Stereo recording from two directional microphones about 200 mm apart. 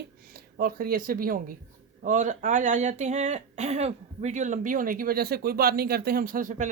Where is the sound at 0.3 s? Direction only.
50° right (ahead or behind).